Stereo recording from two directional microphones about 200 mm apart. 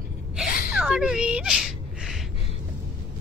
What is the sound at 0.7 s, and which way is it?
Speech, 5° right (ahead or behind).